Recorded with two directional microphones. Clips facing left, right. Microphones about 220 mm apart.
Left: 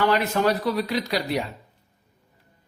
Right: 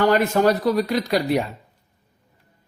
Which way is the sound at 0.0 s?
45° right (ahead or behind).